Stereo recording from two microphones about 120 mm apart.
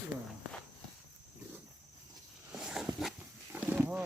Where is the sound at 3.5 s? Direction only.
15° right (ahead or behind).